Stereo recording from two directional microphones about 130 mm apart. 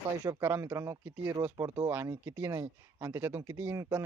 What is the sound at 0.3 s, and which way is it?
Speech, 20° right (ahead or behind).